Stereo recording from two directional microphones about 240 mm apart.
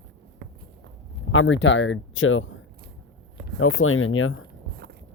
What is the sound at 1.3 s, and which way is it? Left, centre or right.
Speech, left.